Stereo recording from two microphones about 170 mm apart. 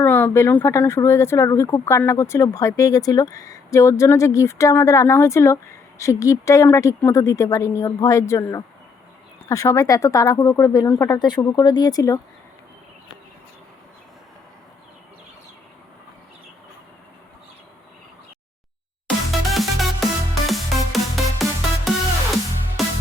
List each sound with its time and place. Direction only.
0.0 s speech: 10° left (ahead or behind)
19.0 s music: centre (ahead or behind)
22.8 s music: centre (ahead or behind)